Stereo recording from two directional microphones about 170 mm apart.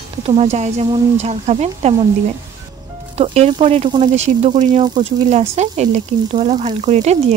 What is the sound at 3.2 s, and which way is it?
Speech, 35° right (ahead or behind).